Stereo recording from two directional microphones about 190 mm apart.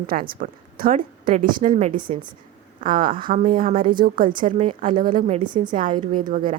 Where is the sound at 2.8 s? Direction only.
45° right (ahead or behind).